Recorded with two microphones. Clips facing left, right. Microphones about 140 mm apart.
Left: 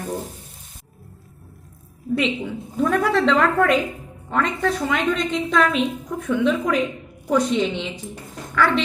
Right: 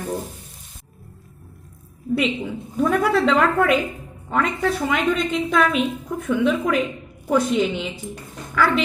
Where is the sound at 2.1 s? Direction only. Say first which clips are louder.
Even; 5° right (ahead or behind).